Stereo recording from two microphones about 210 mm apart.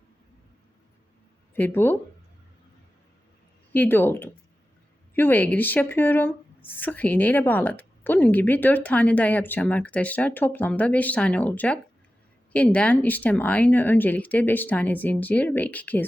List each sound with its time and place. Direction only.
1.5 s speech: 10° left (ahead or behind)
3.7 s speech: 10° left (ahead or behind)